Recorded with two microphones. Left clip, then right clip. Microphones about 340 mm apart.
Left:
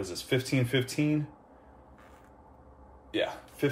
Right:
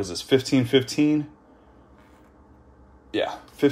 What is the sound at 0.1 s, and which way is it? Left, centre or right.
Speech, right.